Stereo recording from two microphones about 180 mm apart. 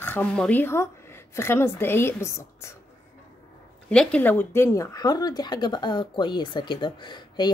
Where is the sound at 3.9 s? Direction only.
5° left (ahead or behind); by 7.5 s 25° left (ahead or behind).